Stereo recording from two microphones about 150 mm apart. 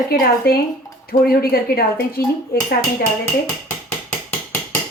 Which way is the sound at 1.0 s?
80° left.